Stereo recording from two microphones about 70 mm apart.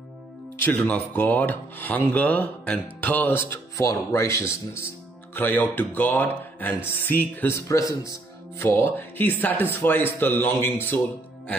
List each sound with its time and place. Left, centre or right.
0.7 s speech: left
3.7 s speech: left
5.3 s speech: left
7.5 s speech: left
8.0 s music: left
8.6 s speech: left